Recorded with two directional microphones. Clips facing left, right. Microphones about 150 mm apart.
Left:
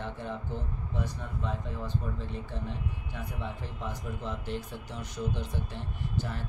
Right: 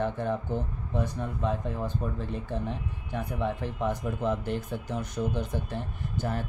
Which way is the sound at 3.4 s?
60° right (ahead or behind).